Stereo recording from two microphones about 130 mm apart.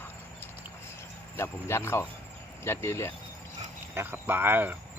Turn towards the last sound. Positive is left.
turn(degrees=-15)  # may be behind; listen again after turning